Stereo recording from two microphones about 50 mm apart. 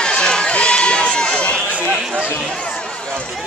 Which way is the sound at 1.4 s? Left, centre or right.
Left.